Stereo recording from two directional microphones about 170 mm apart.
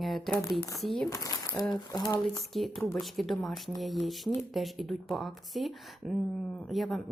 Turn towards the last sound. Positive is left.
turn(degrees=0)  # may be behind; listen again after turning